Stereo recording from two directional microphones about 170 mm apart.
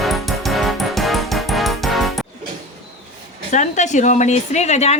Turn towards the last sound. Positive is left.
turn(degrees=40)  # may be behind; listen again after turning